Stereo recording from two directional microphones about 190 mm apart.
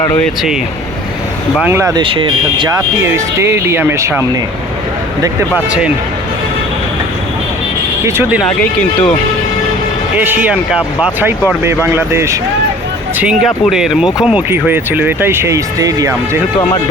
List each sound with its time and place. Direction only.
1.5 s speech: 10° right (ahead or behind)
2.0 s speech: 25° right (ahead or behind)
8.0 s speech: 15° right (ahead or behind)
10.2 s speech: 10° right (ahead or behind)
13.4 s speech: centre (ahead or behind); by 16.4 s 15° right (ahead or behind)